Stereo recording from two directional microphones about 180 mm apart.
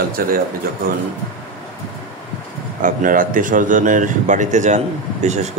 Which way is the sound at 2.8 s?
50° right (ahead or behind).